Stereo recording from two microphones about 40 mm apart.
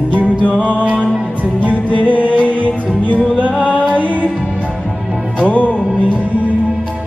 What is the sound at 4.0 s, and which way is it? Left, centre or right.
Music, left.